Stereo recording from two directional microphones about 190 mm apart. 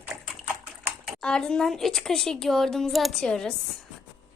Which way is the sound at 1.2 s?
5° left (ahead or behind).